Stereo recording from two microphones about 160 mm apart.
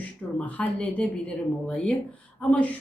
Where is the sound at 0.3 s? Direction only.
10° left (ahead or behind).